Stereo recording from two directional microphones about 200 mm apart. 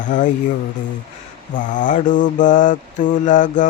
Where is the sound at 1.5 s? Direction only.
40° left (ahead or behind).